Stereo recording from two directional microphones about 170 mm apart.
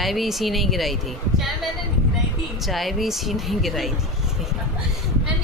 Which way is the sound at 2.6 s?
Centre (ahead or behind).